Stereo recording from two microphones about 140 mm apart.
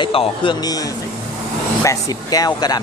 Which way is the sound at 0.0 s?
40° left (ahead or behind).